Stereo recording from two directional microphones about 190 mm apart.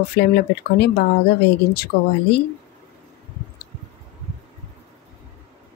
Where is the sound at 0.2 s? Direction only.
55° left (ahead or behind).